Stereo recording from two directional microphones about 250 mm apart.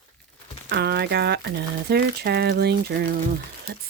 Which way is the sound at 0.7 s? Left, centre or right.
Right.